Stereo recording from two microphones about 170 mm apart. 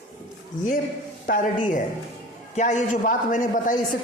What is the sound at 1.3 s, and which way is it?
A woman's voice, 50° left (ahead or behind).